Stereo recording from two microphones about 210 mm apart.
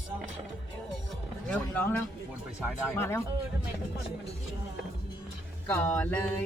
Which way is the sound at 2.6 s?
5° right (ahead or behind).